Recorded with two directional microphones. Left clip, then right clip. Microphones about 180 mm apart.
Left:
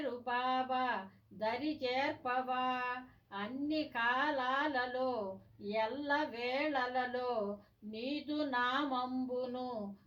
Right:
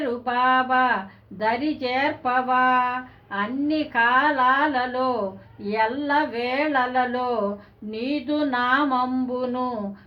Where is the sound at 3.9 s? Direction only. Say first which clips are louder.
Right 15 dB; 40° right (ahead or behind).